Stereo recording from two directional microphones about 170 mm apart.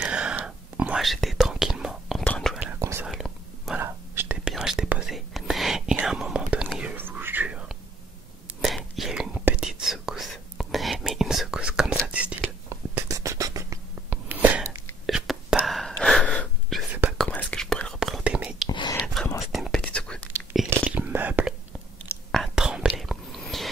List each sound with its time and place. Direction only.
0.0 s whispering: 5° right (ahead or behind)
2.8 s whispering: 15° right (ahead or behind)
3.1 s whispering: centre (ahead or behind)
3.8 s whispering: 15° right (ahead or behind)
12.4 s whispering: 15° right (ahead or behind)
18.7 s whispering: 25° left (ahead or behind)
19.5 s whispering: centre (ahead or behind)
20.9 s whispering: 10° right (ahead or behind)